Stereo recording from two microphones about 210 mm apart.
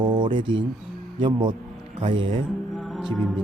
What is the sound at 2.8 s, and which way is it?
Music, centre (ahead or behind).